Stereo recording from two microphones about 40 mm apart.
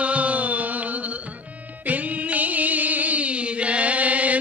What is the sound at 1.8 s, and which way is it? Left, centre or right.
Music, right.